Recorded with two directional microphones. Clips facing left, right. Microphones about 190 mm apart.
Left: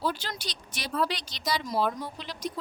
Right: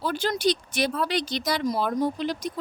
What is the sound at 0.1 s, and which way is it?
Speech, 50° right (ahead or behind).